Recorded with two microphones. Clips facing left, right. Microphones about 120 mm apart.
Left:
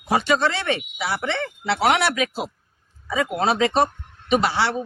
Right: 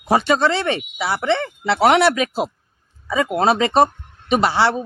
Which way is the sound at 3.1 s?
45° right (ahead or behind).